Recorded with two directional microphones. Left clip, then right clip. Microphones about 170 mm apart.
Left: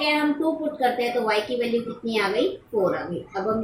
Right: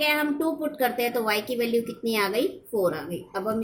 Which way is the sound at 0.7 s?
35° right (ahead or behind).